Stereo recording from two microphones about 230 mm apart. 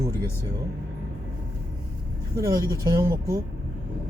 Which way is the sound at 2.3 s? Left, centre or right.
Centre.